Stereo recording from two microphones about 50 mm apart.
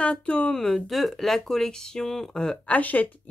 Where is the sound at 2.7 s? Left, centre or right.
Left.